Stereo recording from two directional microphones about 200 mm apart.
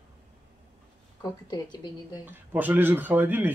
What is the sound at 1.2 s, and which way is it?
Speech, 20° left (ahead or behind).